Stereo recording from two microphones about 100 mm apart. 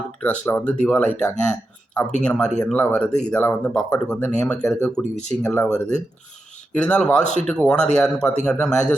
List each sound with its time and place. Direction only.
0.2 s speech: 15° left (ahead or behind)
5.4 s speech: 25° left (ahead or behind)
5.6 s speech: 5° left (ahead or behind)